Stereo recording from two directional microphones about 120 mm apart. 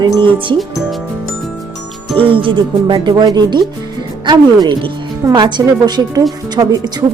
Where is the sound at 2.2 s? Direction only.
45° right (ahead or behind).